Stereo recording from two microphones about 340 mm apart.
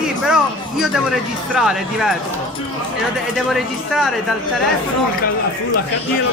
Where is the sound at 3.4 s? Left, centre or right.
Centre.